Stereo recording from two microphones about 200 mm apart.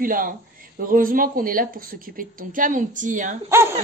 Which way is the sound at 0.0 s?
45° right (ahead or behind).